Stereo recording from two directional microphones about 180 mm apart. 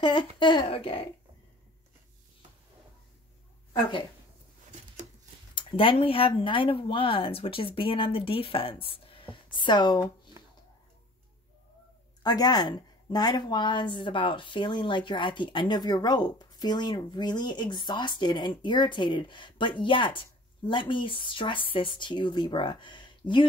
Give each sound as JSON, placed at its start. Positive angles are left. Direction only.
{"t": 0.0, "sound": "a woman's voice", "side_deg": 25}
{"t": 5.5, "sound": "a woman's voice", "side_deg": 30}
{"t": 12.2, "sound": "a woman's voice", "side_deg": 20}